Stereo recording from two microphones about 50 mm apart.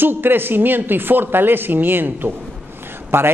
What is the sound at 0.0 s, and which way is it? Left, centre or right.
A man's voice, right.